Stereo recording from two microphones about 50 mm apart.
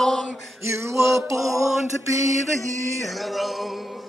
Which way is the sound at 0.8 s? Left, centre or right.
Right.